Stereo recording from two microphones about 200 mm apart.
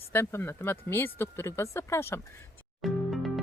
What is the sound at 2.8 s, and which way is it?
Music, centre (ahead or behind).